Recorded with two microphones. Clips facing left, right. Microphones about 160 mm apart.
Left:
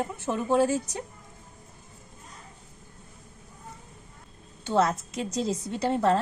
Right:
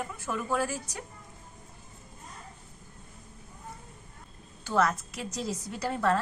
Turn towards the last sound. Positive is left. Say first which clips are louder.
# left 4 dB
turn(degrees=25)  # may be behind; listen again after turning